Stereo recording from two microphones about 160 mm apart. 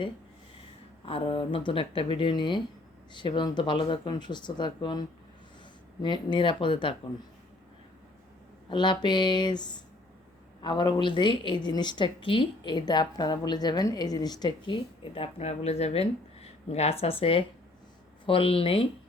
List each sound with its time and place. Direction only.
1.0 s a woman's voice: 35° left (ahead or behind)
8.7 s a woman's voice: 30° left (ahead or behind)